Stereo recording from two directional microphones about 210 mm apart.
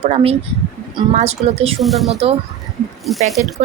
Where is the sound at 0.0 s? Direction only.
30° right (ahead or behind).